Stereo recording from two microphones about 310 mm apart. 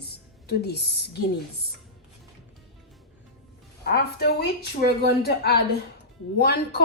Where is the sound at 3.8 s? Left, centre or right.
Left.